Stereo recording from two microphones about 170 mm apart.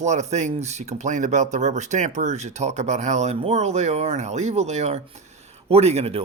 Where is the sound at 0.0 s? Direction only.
45° right (ahead or behind).